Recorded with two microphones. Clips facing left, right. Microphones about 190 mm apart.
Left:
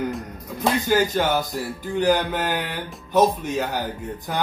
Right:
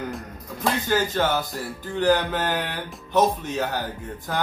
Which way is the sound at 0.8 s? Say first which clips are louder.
Left 2 dB; 15° left (ahead or behind).